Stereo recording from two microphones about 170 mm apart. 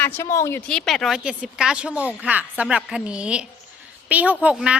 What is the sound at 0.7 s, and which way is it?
A woman's voice, 5° left (ahead or behind).